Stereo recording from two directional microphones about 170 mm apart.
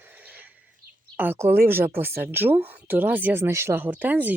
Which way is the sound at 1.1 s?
10° right (ahead or behind).